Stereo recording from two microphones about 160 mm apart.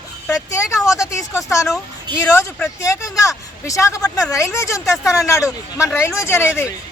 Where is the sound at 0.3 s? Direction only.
20° left (ahead or behind).